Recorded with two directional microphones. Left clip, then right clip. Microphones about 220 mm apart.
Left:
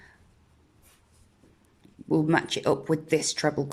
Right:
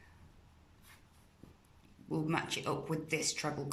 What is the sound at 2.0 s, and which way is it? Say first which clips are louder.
A woman's voice: left 12 dB; 35° left (ahead or behind).